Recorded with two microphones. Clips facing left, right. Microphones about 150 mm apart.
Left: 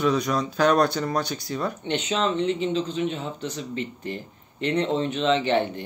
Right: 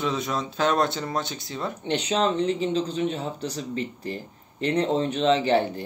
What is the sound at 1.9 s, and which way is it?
Speech, 35° right (ahead or behind).